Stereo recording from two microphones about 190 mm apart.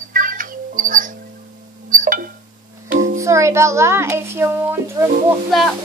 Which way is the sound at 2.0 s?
45° right (ahead or behind).